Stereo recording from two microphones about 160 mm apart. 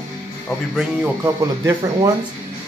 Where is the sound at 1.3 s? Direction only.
20° right (ahead or behind).